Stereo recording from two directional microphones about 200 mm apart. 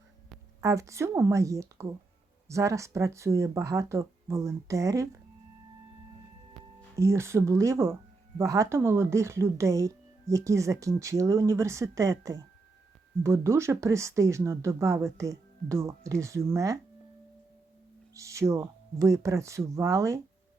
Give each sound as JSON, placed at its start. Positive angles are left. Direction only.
{"t": 0.6, "sound": "speech", "side_deg": -15}
{"t": 7.0, "sound": "speech", "side_deg": -15}
{"t": 18.1, "sound": "speech", "side_deg": -15}